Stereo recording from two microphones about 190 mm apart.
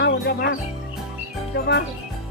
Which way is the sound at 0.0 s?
60° left (ahead or behind).